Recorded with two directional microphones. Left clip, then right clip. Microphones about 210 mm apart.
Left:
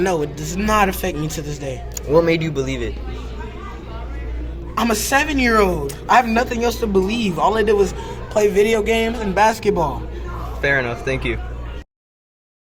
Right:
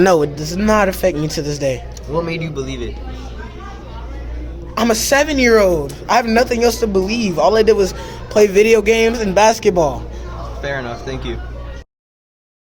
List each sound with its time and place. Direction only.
0.0 s speech: 50° right (ahead or behind)
2.0 s a man's voice: 20° left (ahead or behind)
4.7 s speech: 45° right (ahead or behind)
10.6 s a man's voice: 20° left (ahead or behind)